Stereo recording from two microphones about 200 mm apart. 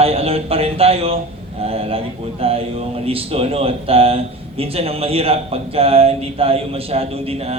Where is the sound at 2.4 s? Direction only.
30° right (ahead or behind).